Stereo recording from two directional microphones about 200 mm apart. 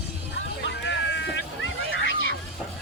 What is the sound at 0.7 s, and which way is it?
Vehicle, 65° left (ahead or behind).